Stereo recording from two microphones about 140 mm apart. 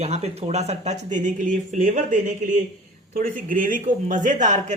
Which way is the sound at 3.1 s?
75° right (ahead or behind).